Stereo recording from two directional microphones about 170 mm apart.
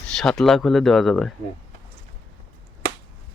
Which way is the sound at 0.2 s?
5° left (ahead or behind).